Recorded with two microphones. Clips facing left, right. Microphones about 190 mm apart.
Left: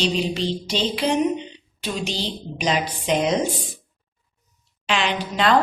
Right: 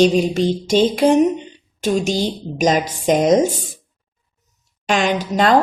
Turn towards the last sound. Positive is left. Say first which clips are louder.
# right 5 dB
turn(degrees=-45)  # may be behind; listen again after turning